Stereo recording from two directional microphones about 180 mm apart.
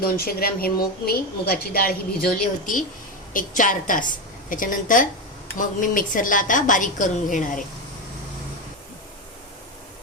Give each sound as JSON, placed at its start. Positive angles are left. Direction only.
{"t": 0.0, "sound": "a woman's voice", "side_deg": 55}